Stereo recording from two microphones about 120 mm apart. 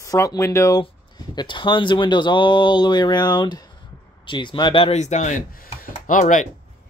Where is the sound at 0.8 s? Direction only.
40° left (ahead or behind).